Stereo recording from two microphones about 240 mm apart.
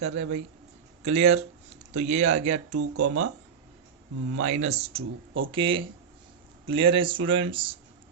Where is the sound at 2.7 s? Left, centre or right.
Right.